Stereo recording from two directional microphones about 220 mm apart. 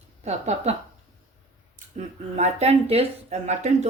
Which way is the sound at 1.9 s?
30° right (ahead or behind).